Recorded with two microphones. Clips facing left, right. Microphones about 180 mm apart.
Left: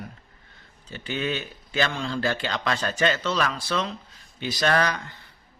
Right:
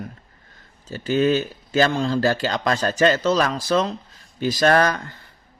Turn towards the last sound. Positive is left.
turn(degrees=-45)  # may be behind; listen again after turning